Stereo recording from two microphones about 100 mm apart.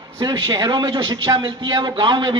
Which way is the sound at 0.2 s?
45° right (ahead or behind).